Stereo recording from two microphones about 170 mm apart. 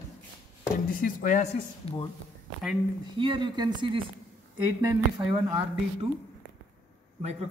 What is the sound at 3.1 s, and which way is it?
Speech, 30° right (ahead or behind).